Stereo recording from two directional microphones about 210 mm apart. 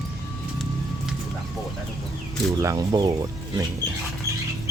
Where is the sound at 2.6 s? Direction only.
15° right (ahead or behind).